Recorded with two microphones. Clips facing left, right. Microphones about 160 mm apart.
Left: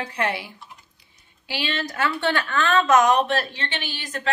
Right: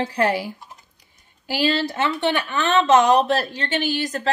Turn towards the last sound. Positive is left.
turn(degrees=-40)  # may be behind; listen again after turning